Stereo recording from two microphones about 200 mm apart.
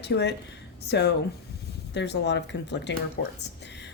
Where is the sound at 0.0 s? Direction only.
60° left (ahead or behind).